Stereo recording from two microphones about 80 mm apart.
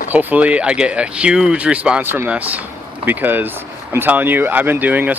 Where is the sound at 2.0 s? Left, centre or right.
Right.